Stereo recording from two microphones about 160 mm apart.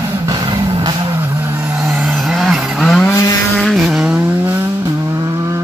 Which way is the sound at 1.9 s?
5° right (ahead or behind).